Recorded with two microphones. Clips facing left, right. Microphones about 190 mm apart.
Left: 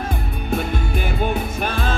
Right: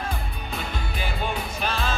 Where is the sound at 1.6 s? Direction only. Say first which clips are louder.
Left 1 dB; 50° left (ahead or behind).